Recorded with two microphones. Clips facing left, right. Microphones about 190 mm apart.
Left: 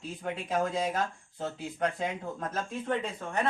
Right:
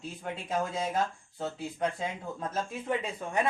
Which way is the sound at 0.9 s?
Centre (ahead or behind).